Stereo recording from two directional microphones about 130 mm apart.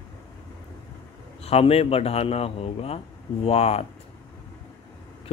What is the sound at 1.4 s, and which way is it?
Speech, 50° left (ahead or behind).